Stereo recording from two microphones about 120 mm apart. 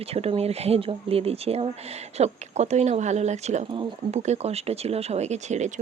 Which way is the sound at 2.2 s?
65° right (ahead or behind).